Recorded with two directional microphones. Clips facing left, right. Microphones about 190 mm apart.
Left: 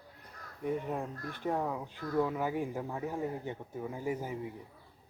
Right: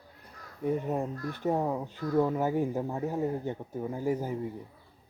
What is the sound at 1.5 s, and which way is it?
Speech, 25° right (ahead or behind).